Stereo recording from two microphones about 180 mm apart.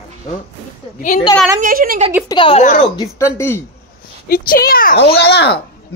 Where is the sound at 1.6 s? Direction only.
55° right (ahead or behind).